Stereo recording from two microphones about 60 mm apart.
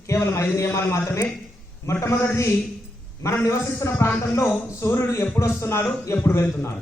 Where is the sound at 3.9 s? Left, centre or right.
Left.